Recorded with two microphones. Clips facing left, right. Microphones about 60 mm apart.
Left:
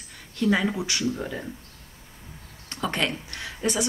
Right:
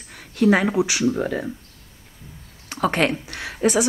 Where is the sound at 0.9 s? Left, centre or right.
Right.